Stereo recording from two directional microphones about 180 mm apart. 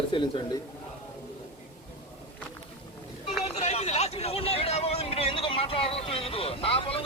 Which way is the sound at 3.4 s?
35° left (ahead or behind).